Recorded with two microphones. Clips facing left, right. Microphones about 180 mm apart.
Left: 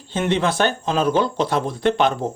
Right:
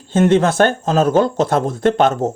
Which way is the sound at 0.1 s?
45° right (ahead or behind).